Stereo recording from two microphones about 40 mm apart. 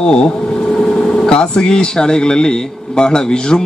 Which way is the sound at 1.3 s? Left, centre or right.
Centre.